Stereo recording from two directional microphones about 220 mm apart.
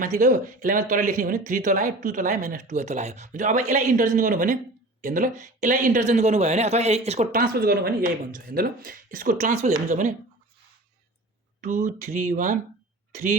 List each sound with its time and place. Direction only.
0.0 s a man's voice: 35° right (ahead or behind)
11.6 s a man's voice: 35° right (ahead or behind)